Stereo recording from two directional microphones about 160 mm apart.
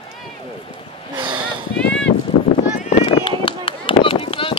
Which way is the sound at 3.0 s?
35° left (ahead or behind).